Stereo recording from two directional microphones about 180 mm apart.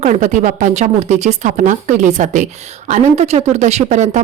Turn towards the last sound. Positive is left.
turn(degrees=-40)  # may be behind; listen again after turning